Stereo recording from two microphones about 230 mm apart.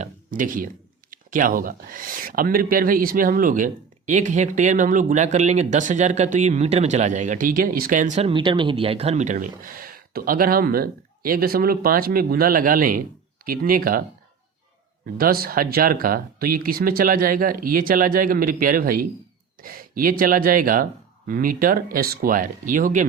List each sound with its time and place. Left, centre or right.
0.0 s a sound: right
1.1 s speech: right
15.0 s speech: right